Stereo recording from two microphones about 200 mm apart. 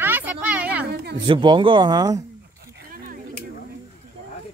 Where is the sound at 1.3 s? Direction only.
25° right (ahead or behind).